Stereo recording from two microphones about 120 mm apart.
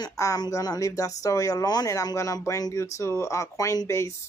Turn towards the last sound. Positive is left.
turn(degrees=25)  # may be behind; listen again after turning